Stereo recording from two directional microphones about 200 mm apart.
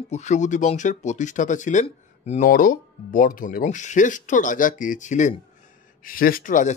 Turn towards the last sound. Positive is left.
turn(degrees=40)  # may be behind; listen again after turning